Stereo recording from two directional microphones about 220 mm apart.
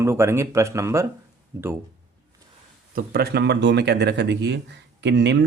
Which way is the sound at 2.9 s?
40° right (ahead or behind).